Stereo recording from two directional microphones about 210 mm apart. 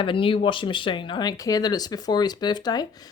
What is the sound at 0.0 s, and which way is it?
Speech, 25° left (ahead or behind).